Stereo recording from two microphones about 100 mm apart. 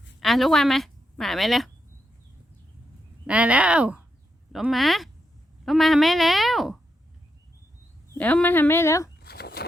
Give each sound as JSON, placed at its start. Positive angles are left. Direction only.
{"t": 0.2, "sound": "a woman's voice", "side_deg": 0}
{"t": 3.2, "sound": "speech", "side_deg": -15}
{"t": 4.7, "sound": "a woman's voice", "side_deg": 0}
{"t": 8.2, "sound": "speech", "side_deg": 15}